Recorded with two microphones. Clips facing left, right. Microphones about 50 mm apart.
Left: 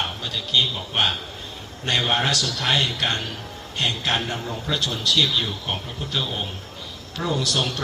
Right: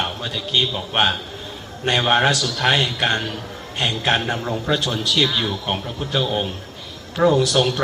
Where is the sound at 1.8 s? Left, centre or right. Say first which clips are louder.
Right 5 dB; right.